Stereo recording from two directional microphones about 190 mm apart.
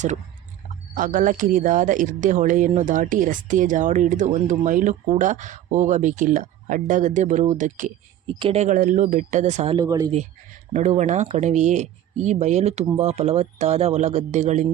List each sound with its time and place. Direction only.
0.9 s speech: 45° right (ahead or behind)
9.7 s speech: 20° right (ahead or behind)
10.7 s speech: 40° right (ahead or behind)